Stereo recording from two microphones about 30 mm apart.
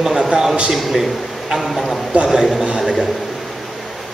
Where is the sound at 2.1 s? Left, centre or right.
Right.